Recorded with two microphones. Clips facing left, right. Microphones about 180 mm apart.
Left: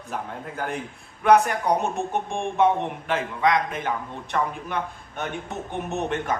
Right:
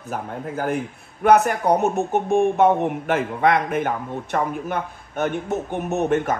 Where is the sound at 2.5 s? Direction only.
45° right (ahead or behind).